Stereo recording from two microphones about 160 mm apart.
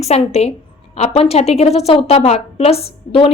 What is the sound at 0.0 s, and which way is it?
A woman's voice, 40° left (ahead or behind).